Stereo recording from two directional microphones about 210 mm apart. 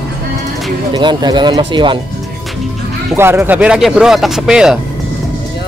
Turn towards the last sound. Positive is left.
turn(degrees=0)  # may be behind; listen again after turning